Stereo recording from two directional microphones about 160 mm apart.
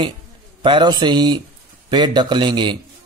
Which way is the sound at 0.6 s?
30° right (ahead or behind).